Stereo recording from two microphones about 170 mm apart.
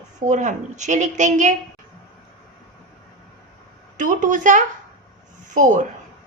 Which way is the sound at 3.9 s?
50° right (ahead or behind).